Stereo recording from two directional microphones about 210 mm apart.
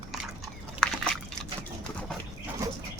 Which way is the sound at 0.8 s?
5° left (ahead or behind).